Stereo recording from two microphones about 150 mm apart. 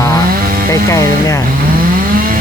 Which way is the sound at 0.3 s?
75° right (ahead or behind).